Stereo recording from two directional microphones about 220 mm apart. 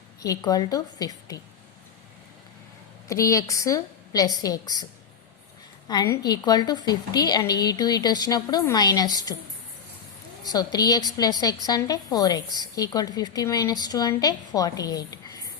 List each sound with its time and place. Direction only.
0.2 s a woman's voice: 15° left (ahead or behind)
3.1 s a woman's voice: 15° left (ahead or behind)
5.9 s a woman's voice: 15° left (ahead or behind)
10.5 s a woman's voice: 15° left (ahead or behind)